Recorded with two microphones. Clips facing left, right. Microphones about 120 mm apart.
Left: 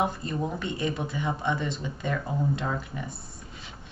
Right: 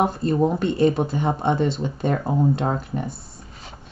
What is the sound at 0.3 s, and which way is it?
Speech, 40° right (ahead or behind).